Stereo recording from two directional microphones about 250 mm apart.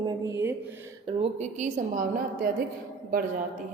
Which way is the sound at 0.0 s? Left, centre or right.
Centre.